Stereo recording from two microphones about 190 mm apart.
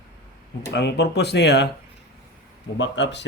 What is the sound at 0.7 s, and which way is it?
Speech, 65° left (ahead or behind).